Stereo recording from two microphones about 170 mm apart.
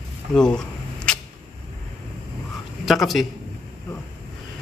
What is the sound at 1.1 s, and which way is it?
Vehicle, 5° left (ahead or behind).